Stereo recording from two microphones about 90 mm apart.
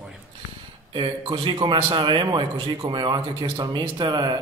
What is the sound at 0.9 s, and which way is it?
A man's voice, 70° right (ahead or behind).